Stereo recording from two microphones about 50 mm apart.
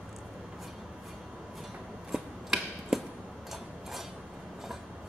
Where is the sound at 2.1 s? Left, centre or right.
Centre.